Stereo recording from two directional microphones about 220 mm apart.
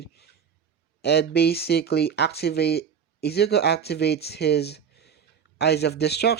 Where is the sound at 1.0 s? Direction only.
50° left (ahead or behind).